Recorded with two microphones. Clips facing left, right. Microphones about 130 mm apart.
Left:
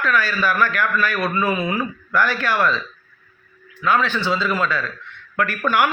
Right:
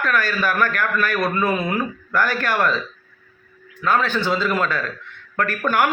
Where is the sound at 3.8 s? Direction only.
45° right (ahead or behind).